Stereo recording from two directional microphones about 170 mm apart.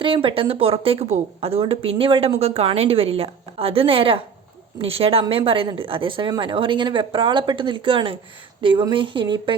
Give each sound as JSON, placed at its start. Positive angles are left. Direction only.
{"t": 0.0, "sound": "a woman's voice", "side_deg": -30}